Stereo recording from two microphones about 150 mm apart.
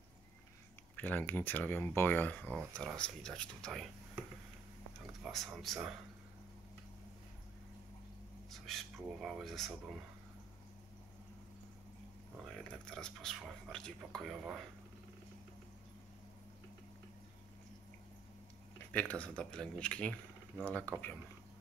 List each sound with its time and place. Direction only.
0.9 s speech: 10° left (ahead or behind)
5.2 s speech: centre (ahead or behind)
8.5 s speech: centre (ahead or behind)
12.5 s speech: 5° left (ahead or behind)
18.9 s speech: 10° left (ahead or behind)